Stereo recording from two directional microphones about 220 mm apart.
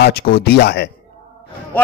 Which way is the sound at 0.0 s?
45° left (ahead or behind).